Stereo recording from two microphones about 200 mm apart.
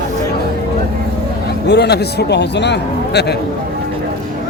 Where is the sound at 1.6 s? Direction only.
55° left (ahead or behind).